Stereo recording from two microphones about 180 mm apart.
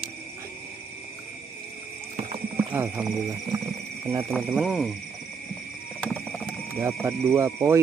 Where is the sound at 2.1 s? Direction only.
30° right (ahead or behind).